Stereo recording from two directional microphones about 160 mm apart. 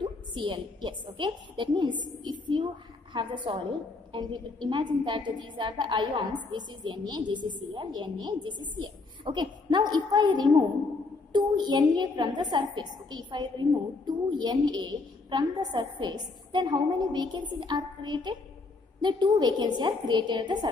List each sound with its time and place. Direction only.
0.0 s a woman's voice: 30° right (ahead or behind)